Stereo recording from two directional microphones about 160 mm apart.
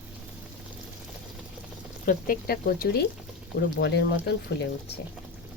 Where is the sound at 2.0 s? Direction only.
65° left (ahead or behind).